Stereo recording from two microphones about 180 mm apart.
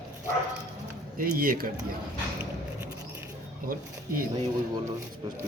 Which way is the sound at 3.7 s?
50° right (ahead or behind).